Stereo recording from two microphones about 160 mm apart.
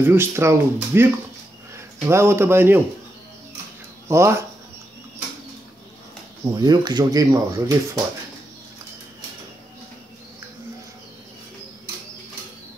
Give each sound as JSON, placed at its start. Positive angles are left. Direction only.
{"t": 0.0, "sound": "speech", "side_deg": -15}
{"t": 4.1, "sound": "speech", "side_deg": -15}
{"t": 6.4, "sound": "speech", "side_deg": -25}